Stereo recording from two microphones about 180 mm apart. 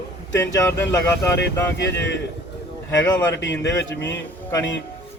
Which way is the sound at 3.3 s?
80° left.